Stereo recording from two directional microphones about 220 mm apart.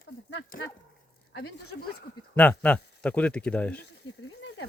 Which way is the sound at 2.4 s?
5° left (ahead or behind).